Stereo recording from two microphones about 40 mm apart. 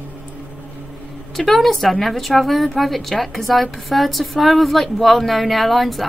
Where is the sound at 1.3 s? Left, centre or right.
Centre.